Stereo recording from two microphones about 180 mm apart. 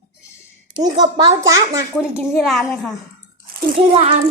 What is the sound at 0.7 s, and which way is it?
A woman's voice, 20° right (ahead or behind).